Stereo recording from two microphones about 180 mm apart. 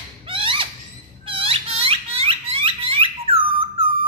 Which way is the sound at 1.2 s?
30° right (ahead or behind).